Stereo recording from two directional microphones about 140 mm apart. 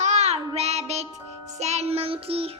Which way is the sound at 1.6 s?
50° right (ahead or behind).